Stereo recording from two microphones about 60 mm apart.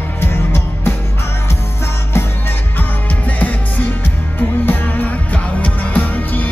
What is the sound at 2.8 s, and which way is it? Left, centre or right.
Music, left.